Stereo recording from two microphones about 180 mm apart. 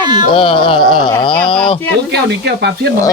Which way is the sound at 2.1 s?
70° right (ahead or behind).